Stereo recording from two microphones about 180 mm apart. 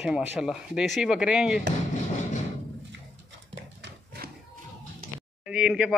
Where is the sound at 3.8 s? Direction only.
60° right (ahead or behind).